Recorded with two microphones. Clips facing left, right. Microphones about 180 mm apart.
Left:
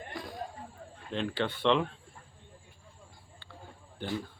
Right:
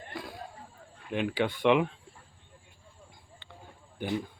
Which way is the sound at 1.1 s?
10° right (ahead or behind).